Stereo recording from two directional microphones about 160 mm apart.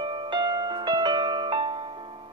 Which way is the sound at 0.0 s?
30° right (ahead or behind).